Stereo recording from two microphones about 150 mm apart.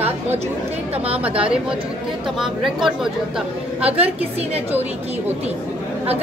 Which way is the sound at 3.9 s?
40° right (ahead or behind).